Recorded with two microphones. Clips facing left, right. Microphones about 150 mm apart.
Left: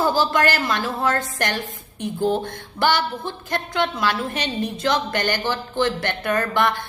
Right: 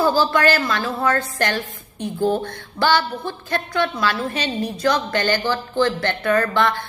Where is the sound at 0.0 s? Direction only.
15° left (ahead or behind).